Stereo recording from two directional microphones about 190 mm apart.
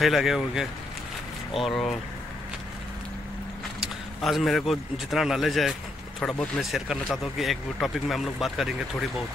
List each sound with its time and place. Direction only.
0.0 s speech: centre (ahead or behind)
4.2 s speech: centre (ahead or behind)